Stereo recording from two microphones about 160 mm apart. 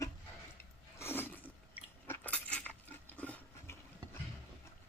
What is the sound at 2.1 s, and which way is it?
Coin, 10° left (ahead or behind).